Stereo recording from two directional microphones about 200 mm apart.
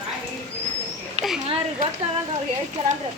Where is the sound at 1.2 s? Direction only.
35° right (ahead or behind).